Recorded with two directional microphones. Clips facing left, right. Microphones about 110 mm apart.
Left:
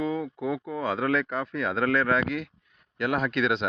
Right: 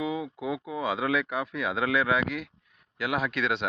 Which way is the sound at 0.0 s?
10° right (ahead or behind).